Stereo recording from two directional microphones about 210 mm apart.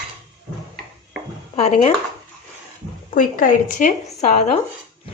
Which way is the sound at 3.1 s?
40° left (ahead or behind).